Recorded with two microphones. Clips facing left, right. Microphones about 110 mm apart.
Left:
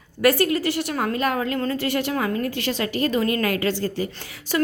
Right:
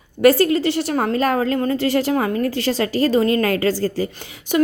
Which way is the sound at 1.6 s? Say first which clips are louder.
Right 5 dB; 25° right (ahead or behind).